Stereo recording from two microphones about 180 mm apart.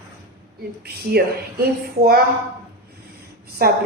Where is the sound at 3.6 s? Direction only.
55° right (ahead or behind).